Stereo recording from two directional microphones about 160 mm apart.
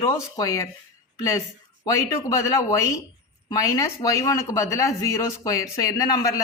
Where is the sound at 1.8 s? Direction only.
20° left (ahead or behind).